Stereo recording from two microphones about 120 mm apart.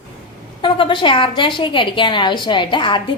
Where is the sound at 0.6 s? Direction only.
45° left (ahead or behind).